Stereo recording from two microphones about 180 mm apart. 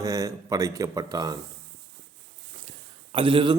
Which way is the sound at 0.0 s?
15° right (ahead or behind).